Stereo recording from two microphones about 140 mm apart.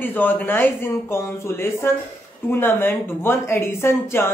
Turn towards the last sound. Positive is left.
turn(degrees=20)  # may be behind; listen again after turning